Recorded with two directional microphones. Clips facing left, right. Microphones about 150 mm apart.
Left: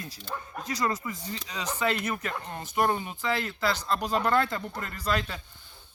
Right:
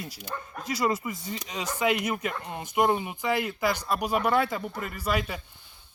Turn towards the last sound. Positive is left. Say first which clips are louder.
# right 1 dB
turn(degrees=-10)  # may be behind; listen again after turning